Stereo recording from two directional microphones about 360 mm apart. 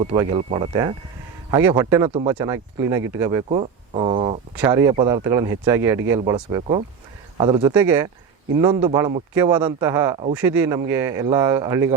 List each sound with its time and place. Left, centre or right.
0.0 s a man's voice: centre